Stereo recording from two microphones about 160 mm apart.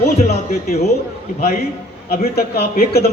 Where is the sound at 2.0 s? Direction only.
80° left.